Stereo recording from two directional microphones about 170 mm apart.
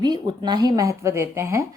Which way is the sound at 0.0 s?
25° right (ahead or behind).